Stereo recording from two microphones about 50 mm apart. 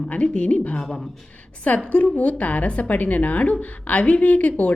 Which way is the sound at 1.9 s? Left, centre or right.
Left.